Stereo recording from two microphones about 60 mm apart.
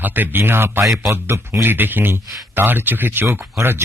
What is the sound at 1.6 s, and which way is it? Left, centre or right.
Speech, right.